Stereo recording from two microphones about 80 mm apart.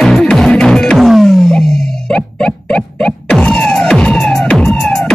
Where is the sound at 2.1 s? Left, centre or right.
Centre.